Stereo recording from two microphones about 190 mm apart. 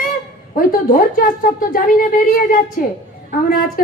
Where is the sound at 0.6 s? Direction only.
50° left (ahead or behind).